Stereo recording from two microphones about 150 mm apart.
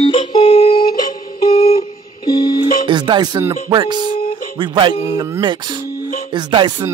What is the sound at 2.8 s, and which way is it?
Speech, 30° right (ahead or behind).